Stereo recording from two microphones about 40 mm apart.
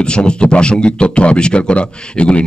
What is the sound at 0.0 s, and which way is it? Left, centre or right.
Speech, left.